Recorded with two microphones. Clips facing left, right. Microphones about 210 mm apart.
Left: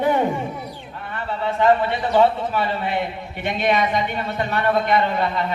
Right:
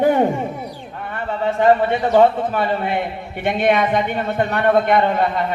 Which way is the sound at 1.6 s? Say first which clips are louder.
Right 3 dB; 45° right (ahead or behind).